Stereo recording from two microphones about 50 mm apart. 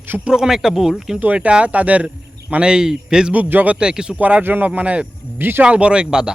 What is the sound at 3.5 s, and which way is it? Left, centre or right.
Speech, right.